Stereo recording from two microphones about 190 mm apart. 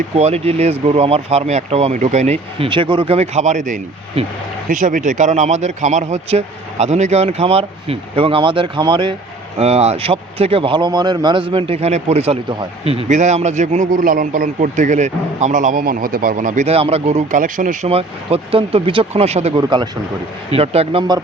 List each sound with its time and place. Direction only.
0.2 s a man's voice: 35° right (ahead or behind)
17.8 s a man's voice: 30° right (ahead or behind)